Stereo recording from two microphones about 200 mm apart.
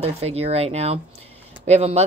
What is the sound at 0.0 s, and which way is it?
Speech, 30° right (ahead or behind).